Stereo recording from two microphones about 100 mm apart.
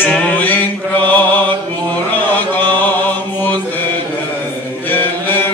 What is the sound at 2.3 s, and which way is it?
Chant, 20° left (ahead or behind).